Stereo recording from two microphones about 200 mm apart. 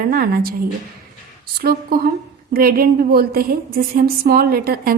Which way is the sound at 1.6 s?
50° right (ahead or behind).